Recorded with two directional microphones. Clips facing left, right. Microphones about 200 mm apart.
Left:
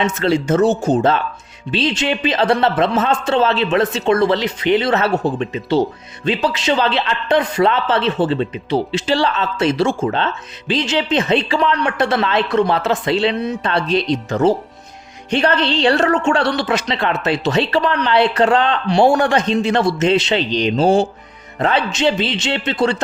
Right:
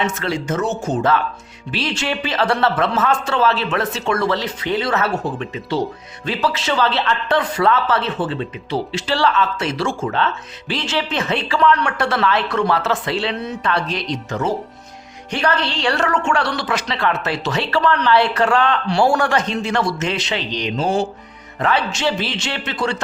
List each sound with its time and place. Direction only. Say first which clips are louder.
0.0 s a woman's voice: left 5 dB; 25° left (ahead or behind)